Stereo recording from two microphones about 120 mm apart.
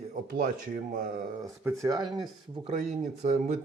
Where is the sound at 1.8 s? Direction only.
30° right (ahead or behind).